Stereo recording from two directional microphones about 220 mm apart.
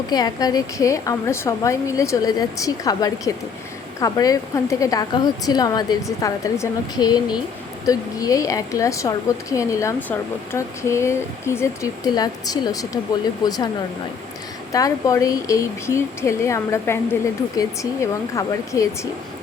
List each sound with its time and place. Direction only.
0.1 s a woman's voice: 15° left (ahead or behind)
14.7 s a woman's voice: 15° left (ahead or behind)